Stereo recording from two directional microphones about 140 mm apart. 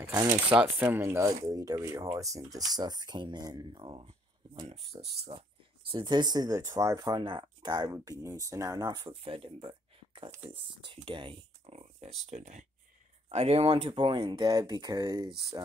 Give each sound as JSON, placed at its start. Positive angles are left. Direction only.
{"t": 0.0, "sound": "speech", "side_deg": -25}
{"t": 0.5, "sound": "speech", "side_deg": -10}
{"t": 9.2, "sound": "speech", "side_deg": -40}
{"t": 13.3, "sound": "speech", "side_deg": -45}